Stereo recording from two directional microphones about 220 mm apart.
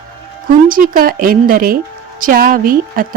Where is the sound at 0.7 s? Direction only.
40° right (ahead or behind).